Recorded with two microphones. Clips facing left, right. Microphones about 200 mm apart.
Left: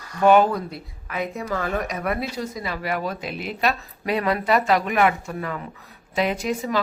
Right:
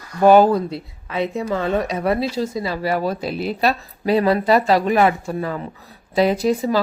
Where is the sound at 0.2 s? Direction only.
35° right (ahead or behind).